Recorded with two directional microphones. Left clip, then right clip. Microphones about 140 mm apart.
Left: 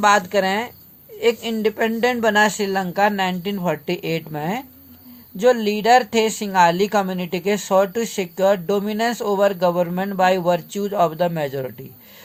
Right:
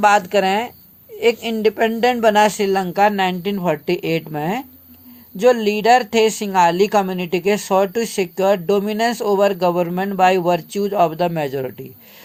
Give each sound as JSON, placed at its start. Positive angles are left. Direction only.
{"t": 0.0, "sound": "speech", "side_deg": -35}